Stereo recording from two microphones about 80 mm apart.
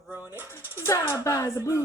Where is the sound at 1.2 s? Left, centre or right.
Left.